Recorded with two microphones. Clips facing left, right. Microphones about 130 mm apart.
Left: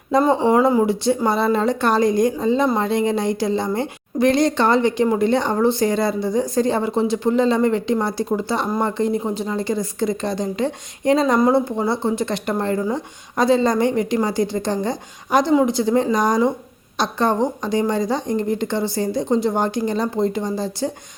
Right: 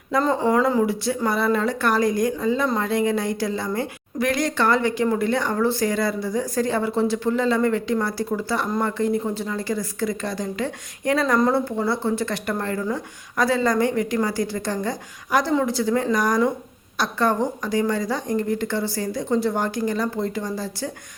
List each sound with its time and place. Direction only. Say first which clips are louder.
0.3 s a woman's voice: left 3 dB; 25° left (ahead or behind)